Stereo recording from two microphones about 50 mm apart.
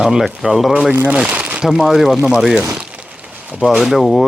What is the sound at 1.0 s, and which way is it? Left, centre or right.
Speech, right.